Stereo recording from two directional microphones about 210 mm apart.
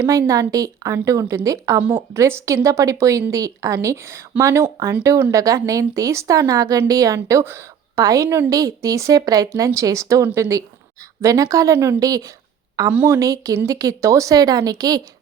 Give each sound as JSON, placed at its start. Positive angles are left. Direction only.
{"t": 0.0, "sound": "speech", "side_deg": -15}